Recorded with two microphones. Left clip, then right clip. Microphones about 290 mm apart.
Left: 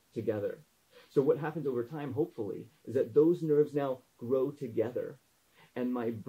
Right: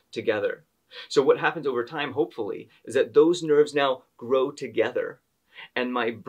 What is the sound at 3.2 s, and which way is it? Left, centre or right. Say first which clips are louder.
Speech: right 7 dB; right.